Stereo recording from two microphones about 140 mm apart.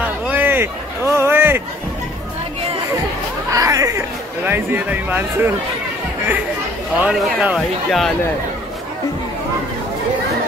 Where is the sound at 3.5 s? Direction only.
25° right (ahead or behind).